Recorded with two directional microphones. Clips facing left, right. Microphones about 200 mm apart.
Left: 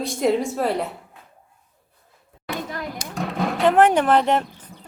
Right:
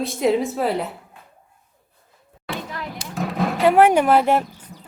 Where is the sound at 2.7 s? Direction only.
45° left (ahead or behind).